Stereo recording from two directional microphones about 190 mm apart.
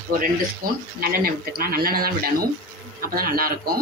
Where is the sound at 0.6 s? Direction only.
50° right (ahead or behind).